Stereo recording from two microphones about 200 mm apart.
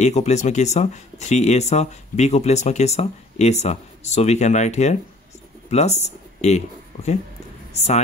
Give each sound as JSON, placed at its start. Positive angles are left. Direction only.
{"t": 0.0, "sound": "speech", "side_deg": 35}